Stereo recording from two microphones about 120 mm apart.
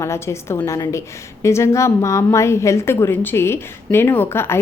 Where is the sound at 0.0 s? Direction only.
20° left (ahead or behind).